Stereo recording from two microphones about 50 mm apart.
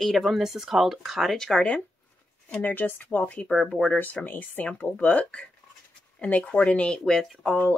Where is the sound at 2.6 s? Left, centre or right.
Left.